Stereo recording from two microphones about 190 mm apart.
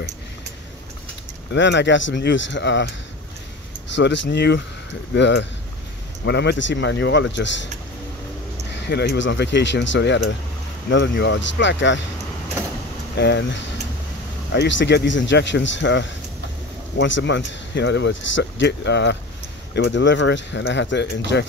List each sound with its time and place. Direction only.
1.5 s speech: 70° left (ahead or behind)
3.9 s speech: 70° left (ahead or behind)
8.7 s speech: 60° left (ahead or behind)
13.1 s speech: 65° left (ahead or behind)